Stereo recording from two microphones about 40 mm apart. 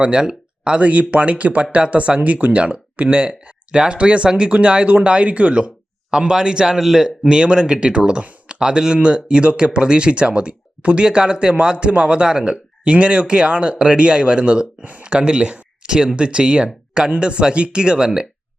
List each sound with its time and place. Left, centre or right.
0.0 s speech: right
6.1 s speech: centre
7.3 s speech: right